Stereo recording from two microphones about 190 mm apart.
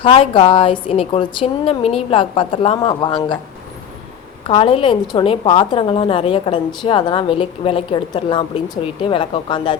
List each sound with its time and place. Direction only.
0.0 s a woman's voice: 30° left (ahead or behind)
4.4 s a woman's voice: 30° left (ahead or behind)